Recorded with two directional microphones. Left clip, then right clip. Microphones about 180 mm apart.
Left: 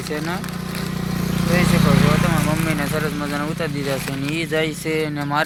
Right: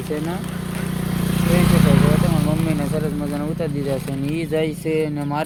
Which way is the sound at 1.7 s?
40° left (ahead or behind).